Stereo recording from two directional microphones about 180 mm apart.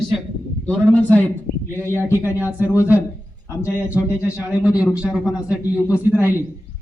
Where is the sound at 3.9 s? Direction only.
10° right (ahead or behind).